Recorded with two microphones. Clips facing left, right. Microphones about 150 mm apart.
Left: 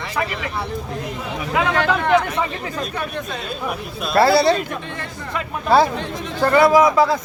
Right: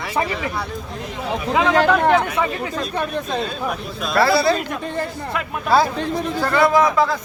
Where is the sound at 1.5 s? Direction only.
35° right (ahead or behind).